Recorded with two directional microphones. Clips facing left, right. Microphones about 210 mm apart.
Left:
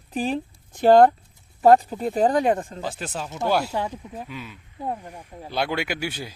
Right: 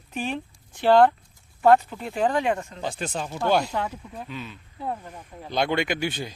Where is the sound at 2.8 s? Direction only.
5° left (ahead or behind).